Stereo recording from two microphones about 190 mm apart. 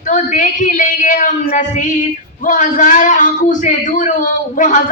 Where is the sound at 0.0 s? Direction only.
45° left (ahead or behind).